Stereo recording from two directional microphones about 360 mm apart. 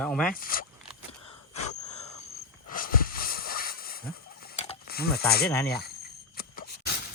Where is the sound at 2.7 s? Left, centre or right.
Left.